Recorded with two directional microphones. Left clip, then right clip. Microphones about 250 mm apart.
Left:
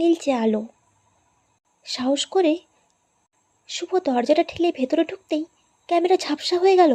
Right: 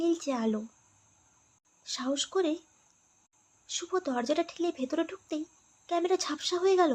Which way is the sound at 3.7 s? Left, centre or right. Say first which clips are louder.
Left 9 dB; centre.